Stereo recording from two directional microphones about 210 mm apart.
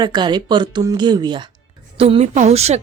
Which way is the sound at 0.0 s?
20° right (ahead or behind).